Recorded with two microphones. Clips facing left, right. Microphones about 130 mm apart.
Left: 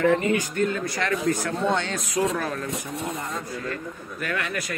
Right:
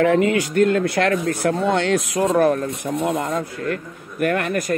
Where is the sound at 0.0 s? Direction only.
90° right; by 2.2 s 70° right (ahead or behind).